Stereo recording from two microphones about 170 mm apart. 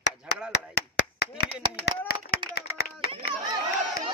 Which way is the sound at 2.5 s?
65° left (ahead or behind).